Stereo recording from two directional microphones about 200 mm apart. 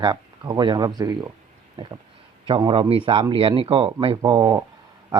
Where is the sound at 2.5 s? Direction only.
25° right (ahead or behind).